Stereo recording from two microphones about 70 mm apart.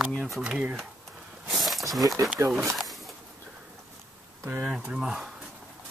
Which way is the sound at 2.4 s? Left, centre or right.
Right.